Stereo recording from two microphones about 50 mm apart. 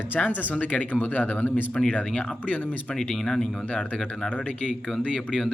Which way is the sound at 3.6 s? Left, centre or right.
Left.